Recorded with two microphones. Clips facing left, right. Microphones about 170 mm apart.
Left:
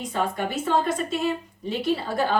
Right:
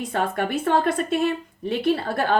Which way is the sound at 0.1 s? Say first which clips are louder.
Right 2 dB; 60° right (ahead or behind).